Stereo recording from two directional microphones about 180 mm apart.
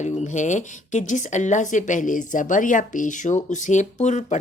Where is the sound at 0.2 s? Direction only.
40° left (ahead or behind).